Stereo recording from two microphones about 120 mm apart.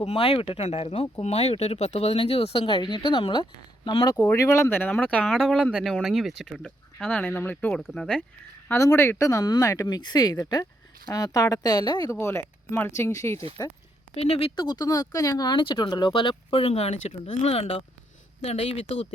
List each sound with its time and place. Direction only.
0.0 s speech: 55° left (ahead or behind); by 4.2 s 35° left (ahead or behind)
4.2 s speech: 20° left (ahead or behind)
5.2 s speech: centre (ahead or behind); by 7.7 s 15° left (ahead or behind)
7.7 s speech: centre (ahead or behind)
8.6 s speech: 25° left (ahead or behind)
14.2 s speech: 55° left (ahead or behind)
14.5 s speech: 35° left (ahead or behind)
16.5 s speech: 50° left (ahead or behind)